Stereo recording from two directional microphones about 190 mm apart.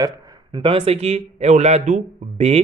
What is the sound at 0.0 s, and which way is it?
A man's voice, 20° right (ahead or behind).